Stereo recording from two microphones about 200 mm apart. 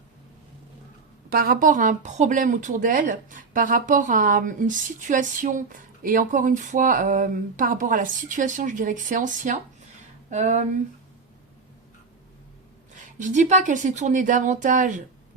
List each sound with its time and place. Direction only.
1.3 s a woman's voice: 50° right (ahead or behind)
12.9 s a woman's voice: 40° right (ahead or behind)